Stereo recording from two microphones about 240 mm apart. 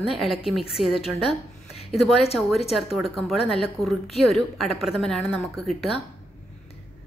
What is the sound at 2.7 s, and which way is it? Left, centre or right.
A woman's voice, centre.